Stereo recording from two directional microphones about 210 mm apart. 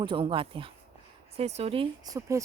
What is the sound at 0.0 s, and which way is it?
A woman's voice, 25° right (ahead or behind).